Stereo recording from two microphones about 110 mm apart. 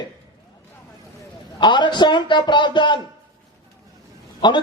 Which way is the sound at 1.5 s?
45° left (ahead or behind).